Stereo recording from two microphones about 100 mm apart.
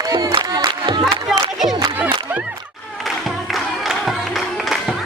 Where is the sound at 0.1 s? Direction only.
40° right (ahead or behind).